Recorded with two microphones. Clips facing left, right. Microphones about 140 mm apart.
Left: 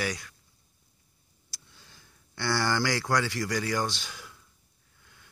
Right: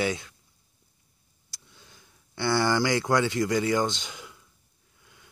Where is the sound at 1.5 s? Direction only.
20° right (ahead or behind).